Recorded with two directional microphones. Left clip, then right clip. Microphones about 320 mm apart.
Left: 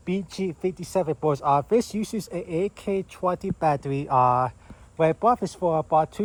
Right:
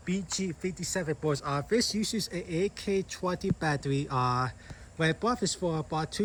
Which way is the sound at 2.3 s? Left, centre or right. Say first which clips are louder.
Left 9 dB; centre.